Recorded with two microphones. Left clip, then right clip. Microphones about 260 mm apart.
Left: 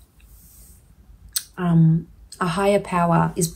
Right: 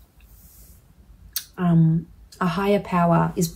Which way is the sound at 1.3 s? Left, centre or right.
Left.